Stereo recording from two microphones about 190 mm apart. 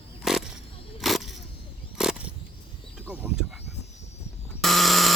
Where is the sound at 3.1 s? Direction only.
5° right (ahead or behind).